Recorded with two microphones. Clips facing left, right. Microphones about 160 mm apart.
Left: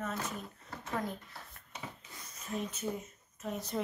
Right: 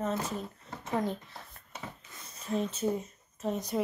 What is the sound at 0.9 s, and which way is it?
Speech, 20° right (ahead or behind).